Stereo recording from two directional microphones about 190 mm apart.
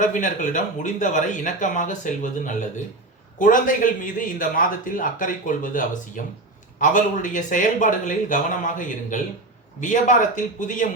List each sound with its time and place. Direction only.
0.0 s a man's voice: 40° left (ahead or behind)